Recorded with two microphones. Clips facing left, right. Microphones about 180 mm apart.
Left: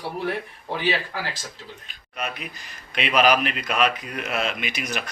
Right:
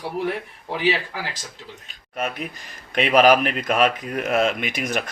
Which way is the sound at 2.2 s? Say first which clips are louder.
Right 4 dB; 50° right (ahead or behind).